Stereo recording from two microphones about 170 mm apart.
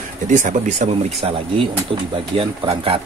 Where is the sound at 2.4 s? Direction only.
35° right (ahead or behind).